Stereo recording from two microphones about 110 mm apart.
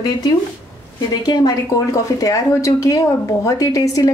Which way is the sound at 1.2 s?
40° left (ahead or behind).